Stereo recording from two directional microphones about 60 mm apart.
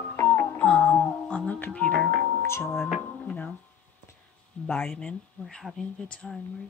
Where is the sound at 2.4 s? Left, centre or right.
Left.